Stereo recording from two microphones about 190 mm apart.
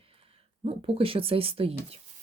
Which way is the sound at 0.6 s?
30° right (ahead or behind).